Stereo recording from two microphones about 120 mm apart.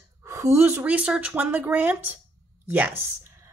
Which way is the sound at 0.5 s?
20° right (ahead or behind).